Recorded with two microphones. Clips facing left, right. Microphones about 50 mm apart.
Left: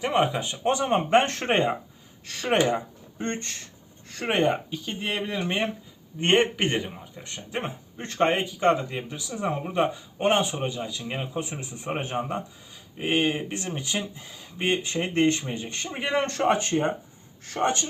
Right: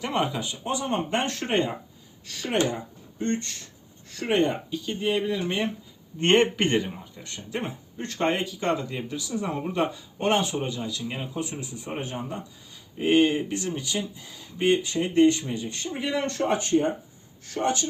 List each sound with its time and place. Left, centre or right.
0.0 s speech: left
0.5 s speech: left
2.2 s speech: left
4.4 s speech: left
7.2 s speech: left
9.6 s speech: centre; by 12.4 s left
13.0 s speech: centre
13.6 s speech: left